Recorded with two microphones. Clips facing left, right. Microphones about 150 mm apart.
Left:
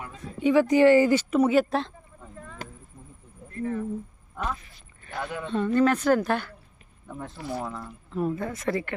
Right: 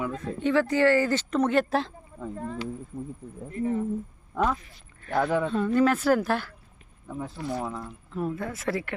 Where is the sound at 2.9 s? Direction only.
55° right (ahead or behind).